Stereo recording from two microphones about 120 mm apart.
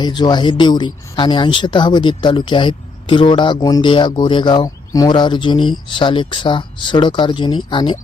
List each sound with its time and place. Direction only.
0.0 s speech: 40° left (ahead or behind)